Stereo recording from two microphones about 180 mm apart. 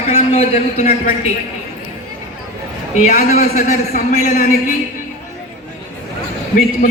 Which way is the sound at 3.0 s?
40° left (ahead or behind).